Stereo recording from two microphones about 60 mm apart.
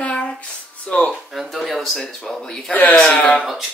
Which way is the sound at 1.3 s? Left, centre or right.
Centre.